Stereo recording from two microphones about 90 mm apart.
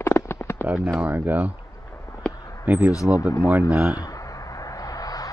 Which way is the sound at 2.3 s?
40° left (ahead or behind).